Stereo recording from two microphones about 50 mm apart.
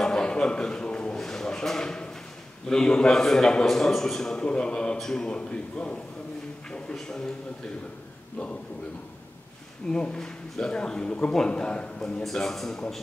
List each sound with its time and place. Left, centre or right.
0.0 s a sound: centre
1.1 s a sound: centre
2.7 s a man's voice: centre
4.5 s a man's voice: centre
9.8 s a man's voice: centre
12.2 s a man's voice: centre